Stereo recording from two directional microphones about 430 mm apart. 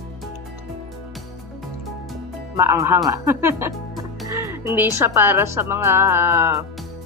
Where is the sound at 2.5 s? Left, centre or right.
Centre.